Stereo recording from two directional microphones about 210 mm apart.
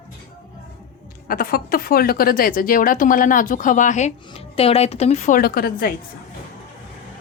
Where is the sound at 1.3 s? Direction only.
45° left (ahead or behind).